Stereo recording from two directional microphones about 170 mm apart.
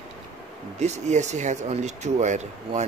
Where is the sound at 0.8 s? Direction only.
40° right (ahead or behind).